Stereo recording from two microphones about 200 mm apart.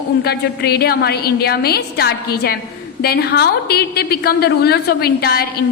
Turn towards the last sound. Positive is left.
turn(degrees=50)  # may be behind; listen again after turning